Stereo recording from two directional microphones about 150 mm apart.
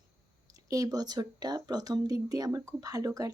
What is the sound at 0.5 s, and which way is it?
Speech, 25° right (ahead or behind).